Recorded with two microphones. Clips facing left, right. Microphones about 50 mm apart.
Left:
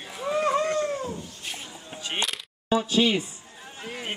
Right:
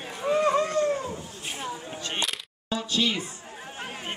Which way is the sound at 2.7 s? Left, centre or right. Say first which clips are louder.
Left 5 dB; centre.